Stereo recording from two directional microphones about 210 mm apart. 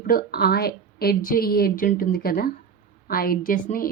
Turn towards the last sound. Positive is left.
turn(degrees=40)  # may be behind; listen again after turning